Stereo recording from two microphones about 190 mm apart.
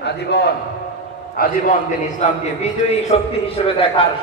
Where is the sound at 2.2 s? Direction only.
40° left (ahead or behind).